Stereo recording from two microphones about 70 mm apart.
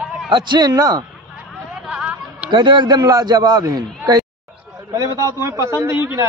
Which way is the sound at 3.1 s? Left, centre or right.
Right.